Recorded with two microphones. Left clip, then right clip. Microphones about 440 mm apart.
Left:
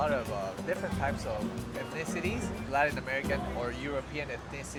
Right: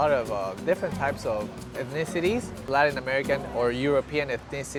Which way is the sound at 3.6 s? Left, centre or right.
Right.